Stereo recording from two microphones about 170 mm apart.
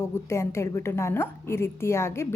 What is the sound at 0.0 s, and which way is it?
A woman's voice, 15° left (ahead or behind).